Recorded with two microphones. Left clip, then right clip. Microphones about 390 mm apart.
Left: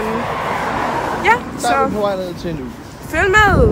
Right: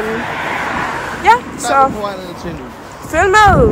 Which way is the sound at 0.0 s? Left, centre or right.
Left.